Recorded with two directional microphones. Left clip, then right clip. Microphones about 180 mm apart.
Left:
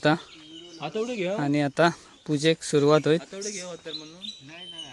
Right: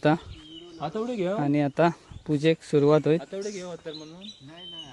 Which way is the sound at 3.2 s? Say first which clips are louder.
Right 1 dB; 55° right (ahead or behind).